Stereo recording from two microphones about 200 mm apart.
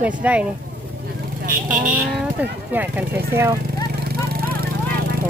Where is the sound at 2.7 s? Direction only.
10° right (ahead or behind).